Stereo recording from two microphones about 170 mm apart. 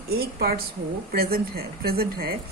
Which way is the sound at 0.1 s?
65° right (ahead or behind).